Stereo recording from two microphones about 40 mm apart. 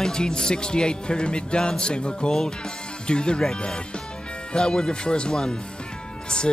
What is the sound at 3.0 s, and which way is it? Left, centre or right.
Speech, left.